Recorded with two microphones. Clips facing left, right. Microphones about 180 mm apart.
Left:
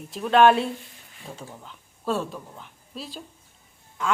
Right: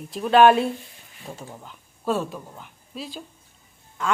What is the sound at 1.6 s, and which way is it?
Speech, 5° right (ahead or behind).